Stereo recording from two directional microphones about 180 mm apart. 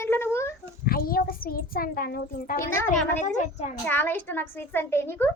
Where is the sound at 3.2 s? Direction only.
40° left (ahead or behind).